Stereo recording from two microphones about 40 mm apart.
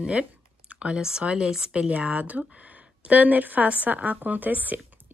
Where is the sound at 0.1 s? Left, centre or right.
Right.